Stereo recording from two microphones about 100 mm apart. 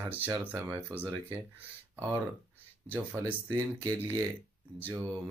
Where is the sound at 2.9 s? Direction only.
20° right (ahead or behind).